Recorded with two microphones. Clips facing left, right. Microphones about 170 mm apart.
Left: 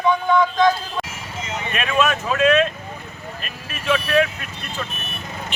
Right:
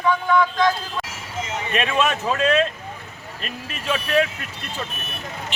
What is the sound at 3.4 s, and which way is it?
Speech, 30° right (ahead or behind).